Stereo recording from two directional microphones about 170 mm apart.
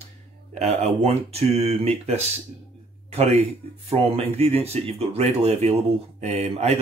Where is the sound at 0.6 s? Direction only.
40° right (ahead or behind).